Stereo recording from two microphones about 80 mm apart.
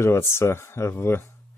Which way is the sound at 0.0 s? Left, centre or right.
Left.